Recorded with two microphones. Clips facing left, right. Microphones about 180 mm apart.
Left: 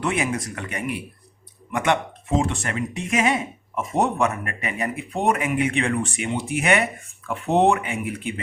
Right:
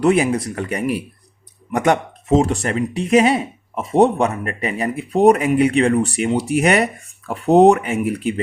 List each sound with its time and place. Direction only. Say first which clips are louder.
0.0 s speech: right 9 dB; 35° right (ahead or behind)